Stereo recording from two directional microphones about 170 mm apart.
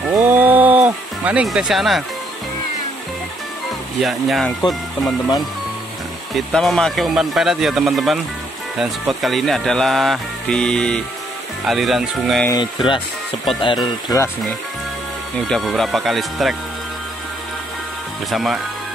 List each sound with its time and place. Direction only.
0.3 s music: 10° right (ahead or behind)
4.0 s speech: centre (ahead or behind)
6.3 s speech: centre (ahead or behind)
12.4 s speech: 25° left (ahead or behind)
15.4 s speech: centre (ahead or behind)
18.3 s speech: centre (ahead or behind)